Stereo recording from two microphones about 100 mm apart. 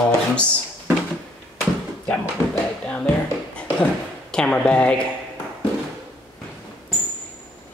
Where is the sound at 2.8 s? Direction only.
10° left (ahead or behind).